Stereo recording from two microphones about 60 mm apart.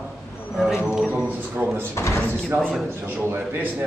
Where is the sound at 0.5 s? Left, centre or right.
Centre.